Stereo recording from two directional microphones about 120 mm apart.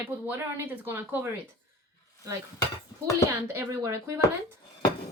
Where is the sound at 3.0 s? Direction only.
20° right (ahead or behind).